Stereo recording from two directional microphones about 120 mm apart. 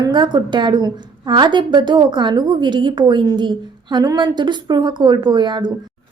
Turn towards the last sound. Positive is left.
turn(degrees=-40)  # may be behind; listen again after turning